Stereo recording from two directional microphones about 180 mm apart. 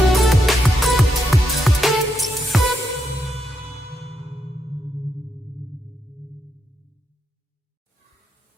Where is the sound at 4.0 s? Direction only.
35° right (ahead or behind).